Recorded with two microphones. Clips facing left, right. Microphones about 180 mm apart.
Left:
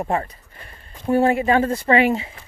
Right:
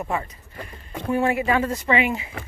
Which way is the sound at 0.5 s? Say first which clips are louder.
Right 9 dB; 75° right (ahead or behind).